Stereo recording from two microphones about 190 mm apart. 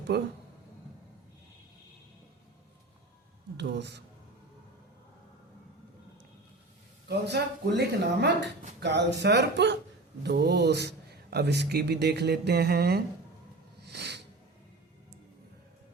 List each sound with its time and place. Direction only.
0.1 s a man's voice: 60° right (ahead or behind)
3.6 s a man's voice: 65° right (ahead or behind)
7.1 s a man's voice: 60° right (ahead or behind)
13.8 s a sound: 60° right (ahead or behind)